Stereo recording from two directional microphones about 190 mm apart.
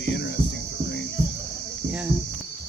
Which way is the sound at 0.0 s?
65° left (ahead or behind).